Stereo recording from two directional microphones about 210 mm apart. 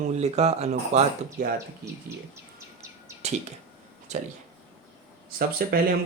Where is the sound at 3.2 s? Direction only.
30° right (ahead or behind).